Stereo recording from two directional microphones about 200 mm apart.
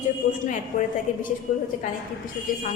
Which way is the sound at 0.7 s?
40° left (ahead or behind).